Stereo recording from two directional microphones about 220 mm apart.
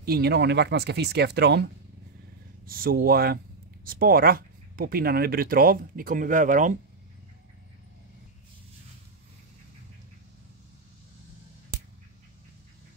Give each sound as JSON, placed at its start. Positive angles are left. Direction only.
{"t": 0.0, "sound": "speech", "side_deg": -45}